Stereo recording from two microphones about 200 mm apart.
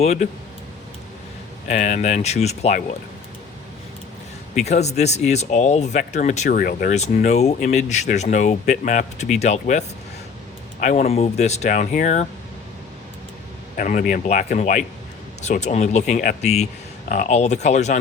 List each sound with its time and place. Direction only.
0.0 s speech: 35° left (ahead or behind)
1.6 s speech: 35° left (ahead or behind)
4.5 s speech: 35° left (ahead or behind)
13.7 s speech: 40° left (ahead or behind)